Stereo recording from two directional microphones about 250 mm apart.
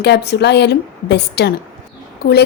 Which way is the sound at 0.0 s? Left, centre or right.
Left.